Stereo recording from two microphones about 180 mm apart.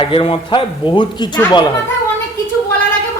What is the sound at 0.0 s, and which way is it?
A man's voice, 30° left (ahead or behind).